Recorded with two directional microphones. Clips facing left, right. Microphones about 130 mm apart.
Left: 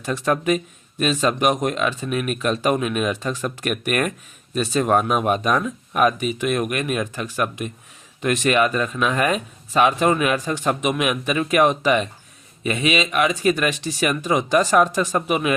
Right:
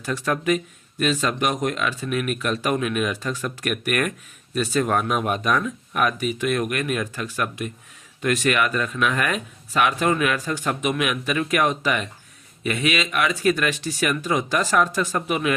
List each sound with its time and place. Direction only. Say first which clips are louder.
0.0 s speech: left 3 dB; 20° left (ahead or behind)